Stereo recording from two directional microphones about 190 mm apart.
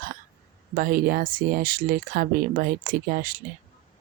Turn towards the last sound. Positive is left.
turn(degrees=-50)  # may be behind; listen again after turning